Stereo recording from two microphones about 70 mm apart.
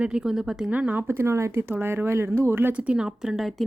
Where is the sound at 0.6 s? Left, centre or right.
Right.